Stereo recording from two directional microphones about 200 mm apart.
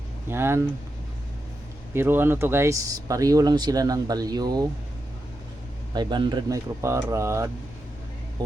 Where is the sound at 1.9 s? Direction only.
10° right (ahead or behind).